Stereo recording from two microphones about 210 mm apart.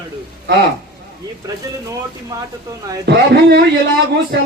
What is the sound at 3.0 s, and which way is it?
Speech, 50° right (ahead or behind).